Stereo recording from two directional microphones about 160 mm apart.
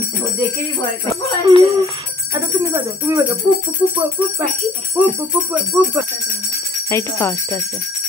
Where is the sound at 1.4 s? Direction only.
20° right (ahead or behind).